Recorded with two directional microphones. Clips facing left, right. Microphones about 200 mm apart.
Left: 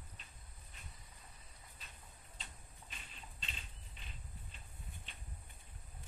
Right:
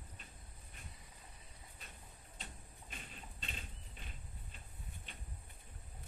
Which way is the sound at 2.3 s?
50° right (ahead or behind).